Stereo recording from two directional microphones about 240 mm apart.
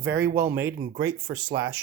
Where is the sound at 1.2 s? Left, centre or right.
Right.